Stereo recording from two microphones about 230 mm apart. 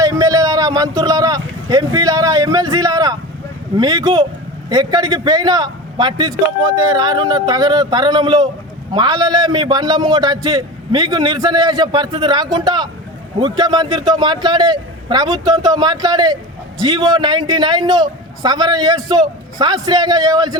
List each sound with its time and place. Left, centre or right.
0.0 s a man's voice: centre